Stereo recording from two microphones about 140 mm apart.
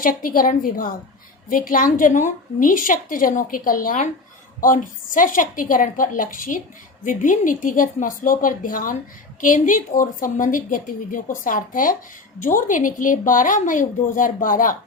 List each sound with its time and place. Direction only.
0.0 s a woman's voice: 80° left